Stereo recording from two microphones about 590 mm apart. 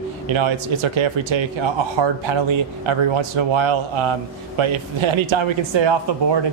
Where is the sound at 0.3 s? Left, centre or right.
Right.